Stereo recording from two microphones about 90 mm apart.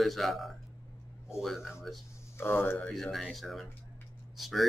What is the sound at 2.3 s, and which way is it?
Speech, 25° left (ahead or behind).